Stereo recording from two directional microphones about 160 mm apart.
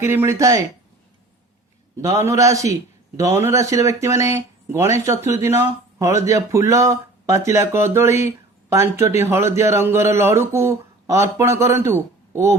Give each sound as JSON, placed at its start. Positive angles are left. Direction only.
{"t": 0.0, "sound": "speech", "side_deg": -15}
{"t": 2.2, "sound": "speech", "side_deg": -20}